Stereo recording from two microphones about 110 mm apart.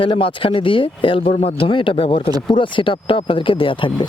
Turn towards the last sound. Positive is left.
turn(degrees=50)  # may be behind; listen again after turning